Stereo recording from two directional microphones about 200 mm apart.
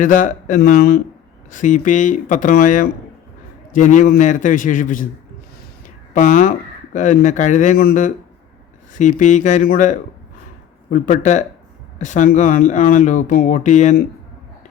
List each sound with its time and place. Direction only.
0.0 s speech: 40° left (ahead or behind)
6.1 s speech: 40° left (ahead or behind)